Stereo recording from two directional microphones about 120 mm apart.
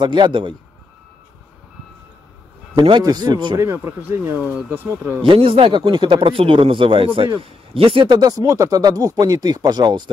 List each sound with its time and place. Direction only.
0.0 s speech: 40° right (ahead or behind)
2.8 s speech: 35° right (ahead or behind)
3.5 s speech: 20° right (ahead or behind)
5.2 s speech: 50° right (ahead or behind)